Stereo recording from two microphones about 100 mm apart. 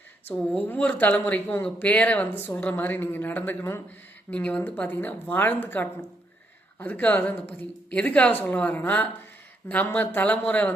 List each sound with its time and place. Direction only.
0.6 s speech: 15° left (ahead or behind)